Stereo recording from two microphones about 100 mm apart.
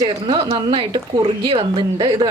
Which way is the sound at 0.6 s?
60° right (ahead or behind).